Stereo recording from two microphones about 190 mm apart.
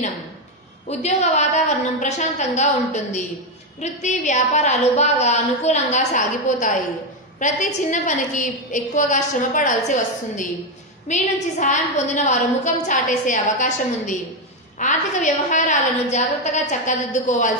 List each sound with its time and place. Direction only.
0.8 s a woman's voice: 35° left (ahead or behind)